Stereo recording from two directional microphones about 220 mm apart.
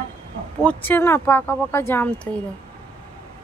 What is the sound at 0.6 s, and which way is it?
Speech, 10° left (ahead or behind).